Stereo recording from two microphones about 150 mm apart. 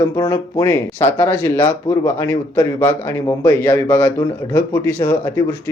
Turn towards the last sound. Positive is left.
turn(degrees=25)  # may be behind; listen again after turning